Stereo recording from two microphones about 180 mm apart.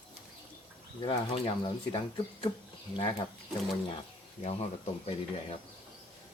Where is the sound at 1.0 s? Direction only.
30° left (ahead or behind).